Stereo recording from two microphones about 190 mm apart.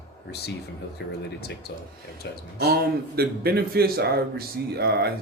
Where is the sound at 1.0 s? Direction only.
60° left (ahead or behind).